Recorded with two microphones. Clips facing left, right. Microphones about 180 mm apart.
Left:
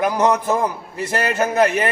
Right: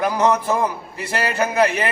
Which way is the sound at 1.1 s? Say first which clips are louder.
Left 1 dB; 45° left (ahead or behind).